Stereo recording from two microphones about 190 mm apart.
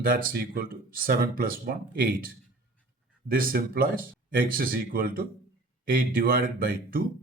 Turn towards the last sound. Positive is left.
turn(degrees=-50)  # may be behind; listen again after turning